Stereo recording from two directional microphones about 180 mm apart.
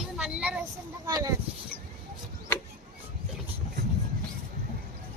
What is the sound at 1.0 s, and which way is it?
Speech, 20° right (ahead or behind).